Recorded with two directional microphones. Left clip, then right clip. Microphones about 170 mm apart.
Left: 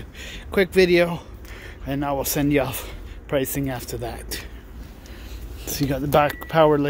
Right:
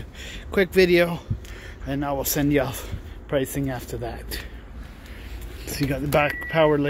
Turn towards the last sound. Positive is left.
turn(degrees=20)  # may be behind; listen again after turning